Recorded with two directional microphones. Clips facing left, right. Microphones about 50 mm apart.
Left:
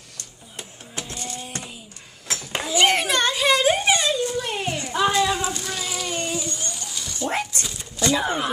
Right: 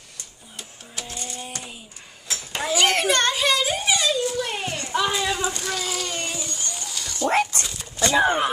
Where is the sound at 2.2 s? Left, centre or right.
Left.